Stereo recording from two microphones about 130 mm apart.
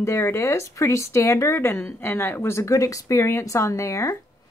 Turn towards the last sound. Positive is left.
turn(degrees=25)  # may be behind; listen again after turning